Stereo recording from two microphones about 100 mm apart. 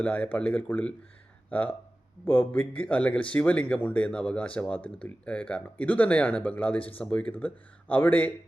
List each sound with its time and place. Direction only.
0.0 s speech: 15° left (ahead or behind)